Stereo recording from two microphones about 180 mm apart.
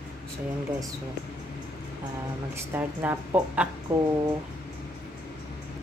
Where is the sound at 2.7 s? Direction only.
10° right (ahead or behind).